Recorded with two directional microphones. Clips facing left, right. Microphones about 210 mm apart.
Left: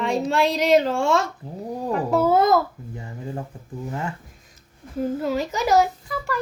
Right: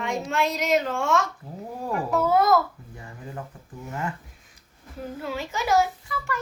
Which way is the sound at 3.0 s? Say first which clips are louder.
Left 5 dB; 25° left (ahead or behind).